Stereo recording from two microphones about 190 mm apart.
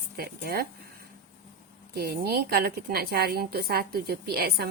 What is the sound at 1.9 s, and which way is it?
A woman's voice, 55° right (ahead or behind).